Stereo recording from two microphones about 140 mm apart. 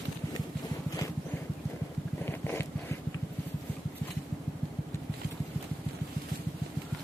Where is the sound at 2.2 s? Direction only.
15° left (ahead or behind).